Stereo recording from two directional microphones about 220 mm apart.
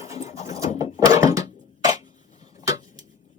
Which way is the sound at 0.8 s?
15° right (ahead or behind).